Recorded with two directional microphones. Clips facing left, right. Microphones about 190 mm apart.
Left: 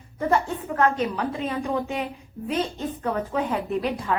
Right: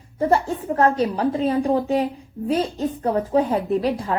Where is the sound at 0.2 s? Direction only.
30° right (ahead or behind).